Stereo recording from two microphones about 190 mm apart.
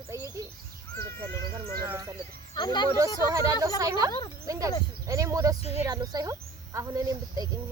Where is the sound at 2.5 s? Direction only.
25° left (ahead or behind).